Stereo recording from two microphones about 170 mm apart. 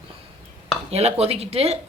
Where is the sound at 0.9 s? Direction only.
40° right (ahead or behind).